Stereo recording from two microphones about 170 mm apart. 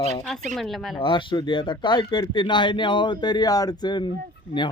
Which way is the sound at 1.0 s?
30° left (ahead or behind).